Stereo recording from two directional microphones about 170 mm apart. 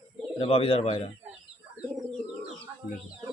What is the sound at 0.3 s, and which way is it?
Speech, 35° left (ahead or behind).